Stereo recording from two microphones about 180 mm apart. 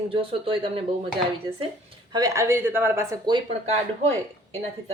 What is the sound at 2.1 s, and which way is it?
Speech, 20° right (ahead or behind).